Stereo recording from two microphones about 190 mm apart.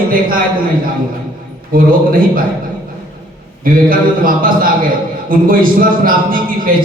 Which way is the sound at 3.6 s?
50° right (ahead or behind).